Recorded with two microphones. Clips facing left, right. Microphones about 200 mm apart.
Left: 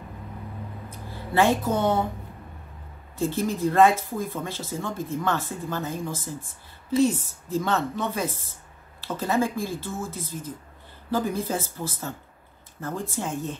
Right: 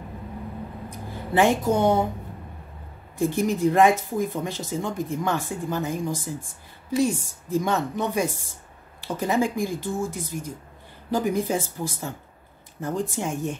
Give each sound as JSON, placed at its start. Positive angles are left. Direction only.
{"t": 0.8, "sound": "a woman's voice", "side_deg": -15}
{"t": 3.2, "sound": "speech", "side_deg": -15}